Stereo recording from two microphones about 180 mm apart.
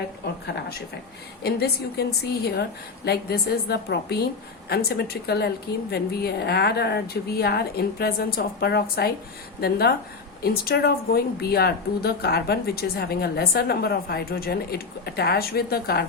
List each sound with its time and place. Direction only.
0.4 s a woman's voice: 70° left (ahead or behind)